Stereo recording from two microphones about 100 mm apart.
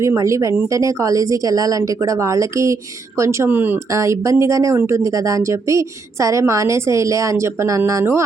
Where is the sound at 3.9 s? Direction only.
30° right (ahead or behind).